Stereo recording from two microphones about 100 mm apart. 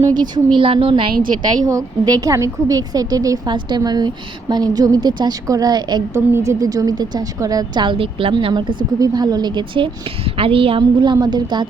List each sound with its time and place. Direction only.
0.1 s a woman's voice: 45° right (ahead or behind)
0.6 s a woman's voice: 65° right (ahead or behind)
1.6 s a woman's voice: 35° right (ahead or behind)
6.1 s a woman's voice: 25° right (ahead or behind); by 7.9 s 45° right (ahead or behind)
7.9 s a woman's voice: 65° right (ahead or behind)
9.0 s a woman's voice: 40° right (ahead or behind)